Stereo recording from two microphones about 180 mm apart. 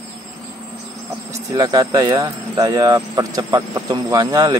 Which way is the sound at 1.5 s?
20° right (ahead or behind).